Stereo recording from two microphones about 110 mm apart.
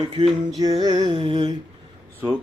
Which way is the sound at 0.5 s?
40° right (ahead or behind).